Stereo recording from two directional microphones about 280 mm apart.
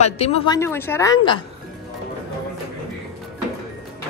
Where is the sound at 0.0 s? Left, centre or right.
Left.